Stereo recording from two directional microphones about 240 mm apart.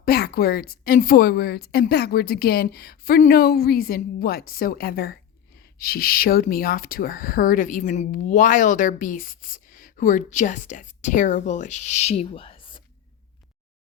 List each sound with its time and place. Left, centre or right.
0.0 s speech: left